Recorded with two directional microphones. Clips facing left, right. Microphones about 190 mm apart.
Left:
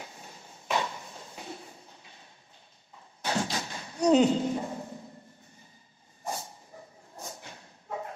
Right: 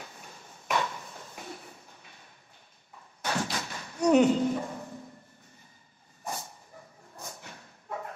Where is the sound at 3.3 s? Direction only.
20° left (ahead or behind).